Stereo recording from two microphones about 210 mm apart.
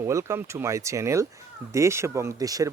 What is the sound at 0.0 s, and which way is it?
Speech, 15° right (ahead or behind).